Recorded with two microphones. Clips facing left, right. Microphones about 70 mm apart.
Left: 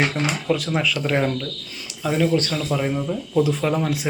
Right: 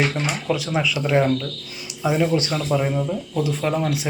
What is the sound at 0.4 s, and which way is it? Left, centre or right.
Speech, centre.